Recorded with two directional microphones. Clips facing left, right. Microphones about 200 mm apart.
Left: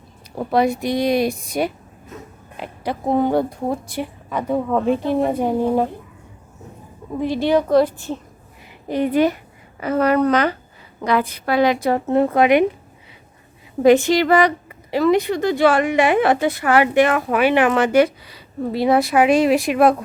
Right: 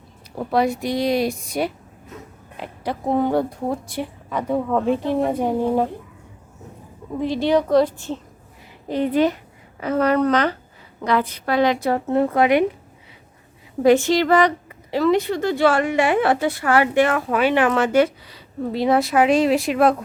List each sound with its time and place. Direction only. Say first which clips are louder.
0.3 s speech: left 2 dB; 20° left (ahead or behind)
7.2 s speech: left 1 dB; 10° left (ahead or behind)
13.8 s speech: left 2 dB; 15° left (ahead or behind)